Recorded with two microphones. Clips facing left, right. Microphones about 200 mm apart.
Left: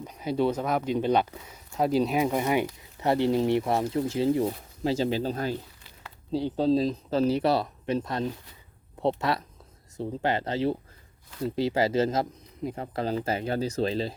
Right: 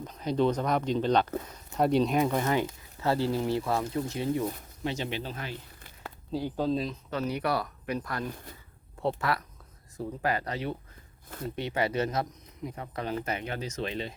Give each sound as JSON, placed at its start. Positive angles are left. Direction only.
{"t": 0.0, "sound": "speech", "side_deg": 10}
{"t": 6.3, "sound": "speech", "side_deg": 25}